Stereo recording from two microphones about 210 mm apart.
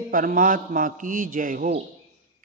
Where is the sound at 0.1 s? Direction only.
40° right (ahead or behind).